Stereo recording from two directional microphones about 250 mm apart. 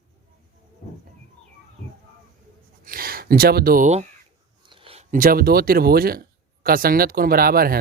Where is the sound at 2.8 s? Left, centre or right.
Right.